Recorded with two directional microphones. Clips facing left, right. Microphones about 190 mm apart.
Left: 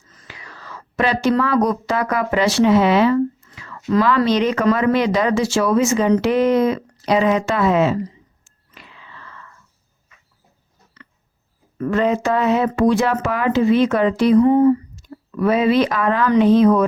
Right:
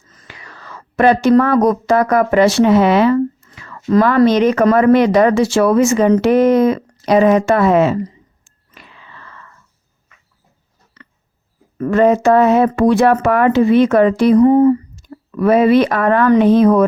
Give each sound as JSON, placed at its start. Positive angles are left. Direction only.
{"t": 0.1, "sound": "speech", "side_deg": -50}
{"t": 8.7, "sound": "whispering", "side_deg": -50}
{"t": 11.8, "sound": "speech", "side_deg": -50}
{"t": 15.4, "sound": "speech", "side_deg": -55}